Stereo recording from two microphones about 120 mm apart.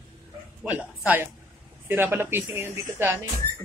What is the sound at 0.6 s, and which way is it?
A man's voice, 15° right (ahead or behind).